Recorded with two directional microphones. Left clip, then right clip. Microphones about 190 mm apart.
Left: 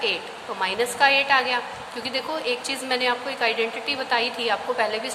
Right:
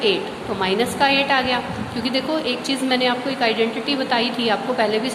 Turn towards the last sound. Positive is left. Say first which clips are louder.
# right 4 dB
turn(degrees=25)  # may be behind; listen again after turning